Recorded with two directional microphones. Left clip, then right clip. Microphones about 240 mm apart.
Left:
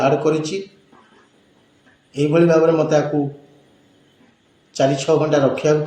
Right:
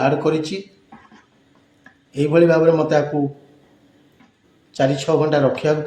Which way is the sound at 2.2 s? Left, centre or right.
Right.